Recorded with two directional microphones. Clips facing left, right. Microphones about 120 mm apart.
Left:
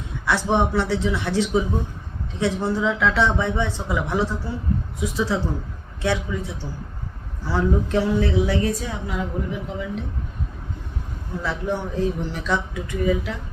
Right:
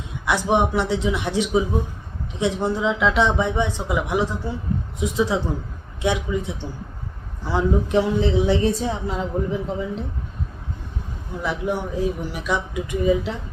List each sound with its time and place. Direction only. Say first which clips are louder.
0.3 s a woman's voice: right 1 dB; 15° right (ahead or behind); by 10.0 s 30° right (ahead or behind)
11.4 s speech: right 2 dB; 10° right (ahead or behind)